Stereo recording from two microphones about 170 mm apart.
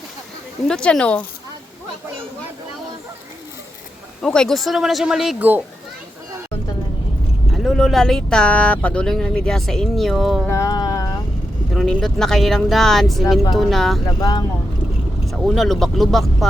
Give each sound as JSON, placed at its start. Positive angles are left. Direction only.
{"t": 0.7, "sound": "speech", "side_deg": 5}
{"t": 4.2, "sound": "speech", "side_deg": 5}
{"t": 7.5, "sound": "speech", "side_deg": 0}
{"t": 10.5, "sound": "music", "side_deg": 20}
{"t": 11.7, "sound": "speech", "side_deg": 0}
{"t": 14.2, "sound": "speech", "side_deg": 25}
{"t": 15.3, "sound": "speech", "side_deg": 0}